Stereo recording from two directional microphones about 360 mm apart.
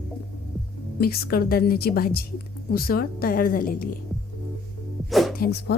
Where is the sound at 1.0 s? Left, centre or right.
Left.